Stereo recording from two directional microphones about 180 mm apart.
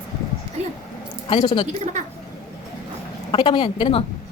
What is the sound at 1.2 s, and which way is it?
Speech, 25° left (ahead or behind).